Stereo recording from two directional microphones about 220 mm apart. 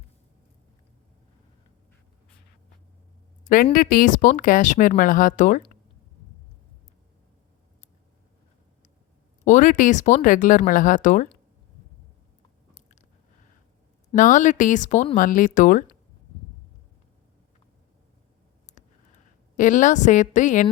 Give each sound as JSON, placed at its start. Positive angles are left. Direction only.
{"t": 3.4, "sound": "a woman's voice", "side_deg": 40}
{"t": 9.4, "sound": "a woman's voice", "side_deg": 35}
{"t": 14.2, "sound": "a woman's voice", "side_deg": 35}
{"t": 19.5, "sound": "a woman's voice", "side_deg": 35}